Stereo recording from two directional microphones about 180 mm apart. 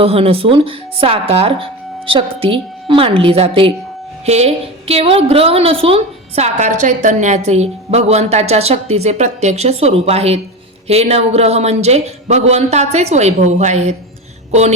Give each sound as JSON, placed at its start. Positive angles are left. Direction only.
{"t": 0.0, "sound": "a woman's voice", "side_deg": -35}